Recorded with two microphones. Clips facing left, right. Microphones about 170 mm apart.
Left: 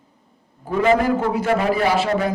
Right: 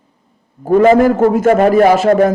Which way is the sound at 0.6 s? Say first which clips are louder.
Right 9 dB; 45° right (ahead or behind).